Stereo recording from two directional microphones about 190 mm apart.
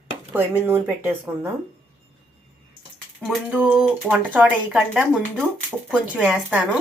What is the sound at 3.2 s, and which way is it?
Speech, 5° right (ahead or behind).